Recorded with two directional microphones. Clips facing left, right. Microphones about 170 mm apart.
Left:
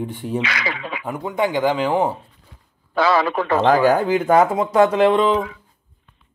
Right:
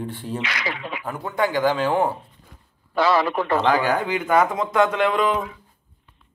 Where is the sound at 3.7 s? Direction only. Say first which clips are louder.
Left 9 dB; 40° left (ahead or behind).